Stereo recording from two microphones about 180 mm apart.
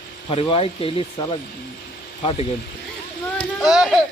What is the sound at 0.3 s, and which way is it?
Speech, 30° left (ahead or behind).